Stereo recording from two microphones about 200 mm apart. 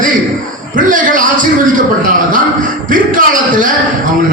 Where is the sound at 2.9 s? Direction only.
40° right (ahead or behind).